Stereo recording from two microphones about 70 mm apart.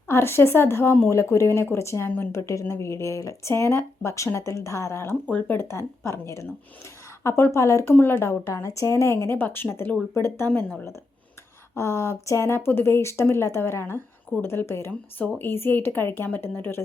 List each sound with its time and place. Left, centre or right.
0.1 s speech: left
2.0 s speech: left
2.3 s speech: left
5.2 s speech: left
5.5 s speech: left
7.9 s speech: left
11.7 s speech: left